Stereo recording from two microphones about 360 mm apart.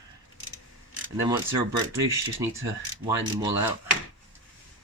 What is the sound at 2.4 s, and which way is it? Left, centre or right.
Speech, centre.